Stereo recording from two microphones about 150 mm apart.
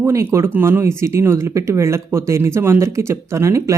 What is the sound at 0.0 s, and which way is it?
Speech, 20° right (ahead or behind).